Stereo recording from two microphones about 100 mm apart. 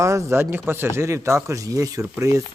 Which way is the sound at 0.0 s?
30° right (ahead or behind).